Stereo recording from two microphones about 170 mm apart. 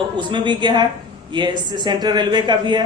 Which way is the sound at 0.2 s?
25° right (ahead or behind).